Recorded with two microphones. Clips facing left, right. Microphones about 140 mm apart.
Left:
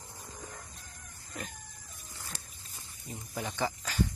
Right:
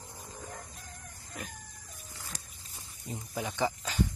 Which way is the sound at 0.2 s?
Centre (ahead or behind).